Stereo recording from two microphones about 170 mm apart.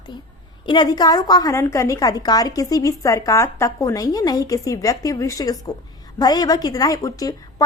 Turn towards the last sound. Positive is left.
turn(degrees=20)  # may be behind; listen again after turning